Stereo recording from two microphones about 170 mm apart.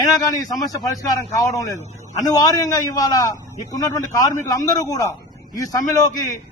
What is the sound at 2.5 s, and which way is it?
A man's voice, 20° left (ahead or behind).